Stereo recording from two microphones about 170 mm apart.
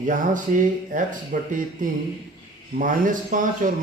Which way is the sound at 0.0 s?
50° right (ahead or behind).